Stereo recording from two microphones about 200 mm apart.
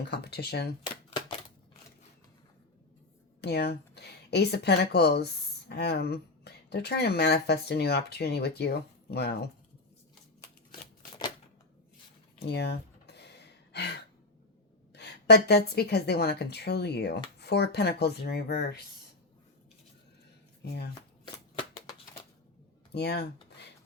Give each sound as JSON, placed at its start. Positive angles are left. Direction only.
{"t": 0.1, "sound": "speech", "side_deg": 55}
{"t": 3.4, "sound": "speech", "side_deg": 55}
{"t": 12.4, "sound": "a sound", "side_deg": 55}
{"t": 14.9, "sound": "speech", "side_deg": 55}
{"t": 20.6, "sound": "speech", "side_deg": 55}
{"t": 22.9, "sound": "speech", "side_deg": 55}